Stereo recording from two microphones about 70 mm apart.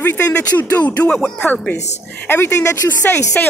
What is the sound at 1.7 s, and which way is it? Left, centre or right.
Speech, left.